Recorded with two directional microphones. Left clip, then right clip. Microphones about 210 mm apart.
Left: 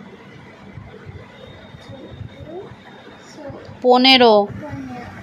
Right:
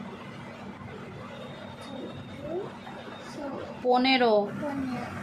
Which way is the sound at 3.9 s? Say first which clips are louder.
Left 11 dB; 40° left (ahead or behind).